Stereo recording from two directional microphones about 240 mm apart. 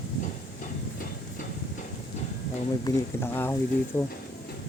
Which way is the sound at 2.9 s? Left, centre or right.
Centre.